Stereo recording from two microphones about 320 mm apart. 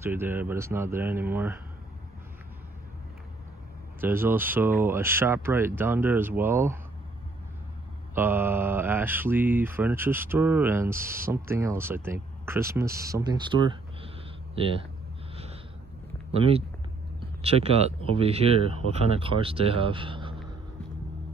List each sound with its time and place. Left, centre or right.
0.0 s speech: centre
4.0 s speech: centre
8.1 s speech: centre
13.0 s a sound: centre
15.3 s snort: centre
16.3 s speech: centre